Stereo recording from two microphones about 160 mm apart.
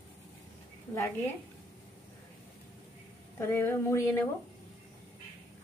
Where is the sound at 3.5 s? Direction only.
15° left (ahead or behind).